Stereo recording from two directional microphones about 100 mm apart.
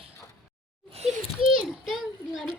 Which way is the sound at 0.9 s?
90° right.